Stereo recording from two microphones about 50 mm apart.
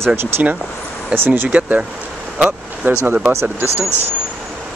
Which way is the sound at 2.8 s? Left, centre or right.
Right.